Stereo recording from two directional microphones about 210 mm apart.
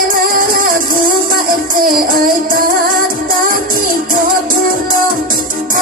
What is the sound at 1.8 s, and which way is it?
Music, 45° right (ahead or behind).